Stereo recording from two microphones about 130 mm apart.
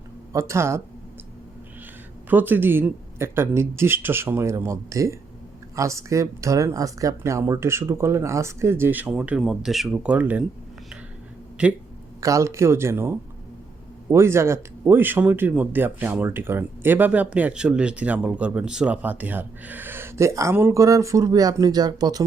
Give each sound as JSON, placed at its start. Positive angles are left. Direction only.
{"t": 0.3, "sound": "speech", "side_deg": -20}
{"t": 2.3, "sound": "speech", "side_deg": -15}
{"t": 11.6, "sound": "speech", "side_deg": -10}
{"t": 12.2, "sound": "speech", "side_deg": -25}